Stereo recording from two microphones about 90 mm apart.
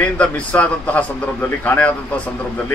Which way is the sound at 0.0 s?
15° left (ahead or behind).